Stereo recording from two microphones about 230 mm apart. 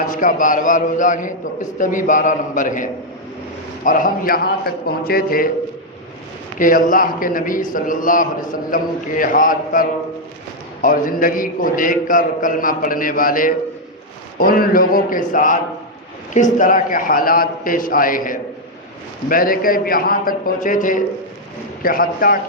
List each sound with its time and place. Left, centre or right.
0.2 s a man's voice: left
6.6 s a man's voice: left
10.8 s a man's voice: left